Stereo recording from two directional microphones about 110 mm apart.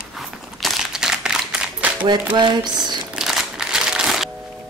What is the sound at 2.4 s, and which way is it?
Speech, 40° right (ahead or behind).